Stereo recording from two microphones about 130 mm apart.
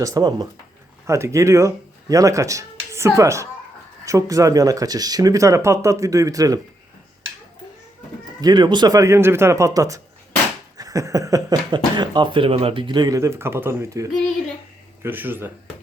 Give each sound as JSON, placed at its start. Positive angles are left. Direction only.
{"t": 0.0, "sound": "speech", "side_deg": -30}
{"t": 8.4, "sound": "speech", "side_deg": -30}
{"t": 10.8, "sound": "a sound", "side_deg": -25}
{"t": 11.7, "sound": "speech", "side_deg": -35}